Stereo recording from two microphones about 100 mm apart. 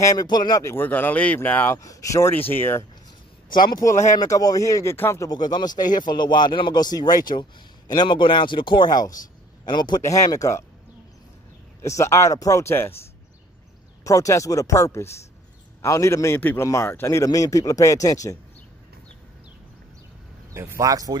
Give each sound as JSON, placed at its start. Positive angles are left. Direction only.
{"t": 0.0, "sound": "speech", "side_deg": 35}
{"t": 0.7, "sound": "speech", "side_deg": 20}
{"t": 1.8, "sound": "speech", "side_deg": 35}
{"t": 2.5, "sound": "speech", "side_deg": 20}
{"t": 3.8, "sound": "speech", "side_deg": 35}
{"t": 5.3, "sound": "speech", "side_deg": 45}
{"t": 10.0, "sound": "speech", "side_deg": 30}
{"t": 11.8, "sound": "speech", "side_deg": 30}
{"t": 14.0, "sound": "speech", "side_deg": 35}
{"t": 20.5, "sound": "speech", "side_deg": -30}